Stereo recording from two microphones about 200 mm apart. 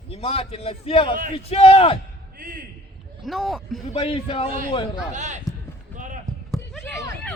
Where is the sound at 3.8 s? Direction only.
30° left (ahead or behind).